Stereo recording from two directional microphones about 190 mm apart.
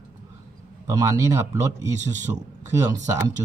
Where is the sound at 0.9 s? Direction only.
20° right (ahead or behind).